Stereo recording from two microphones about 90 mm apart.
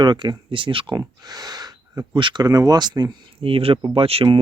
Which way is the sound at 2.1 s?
60° right (ahead or behind).